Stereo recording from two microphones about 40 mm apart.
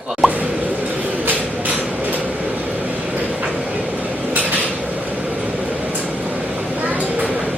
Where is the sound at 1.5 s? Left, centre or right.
Right.